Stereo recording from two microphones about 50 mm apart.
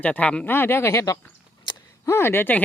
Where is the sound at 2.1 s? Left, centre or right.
Left.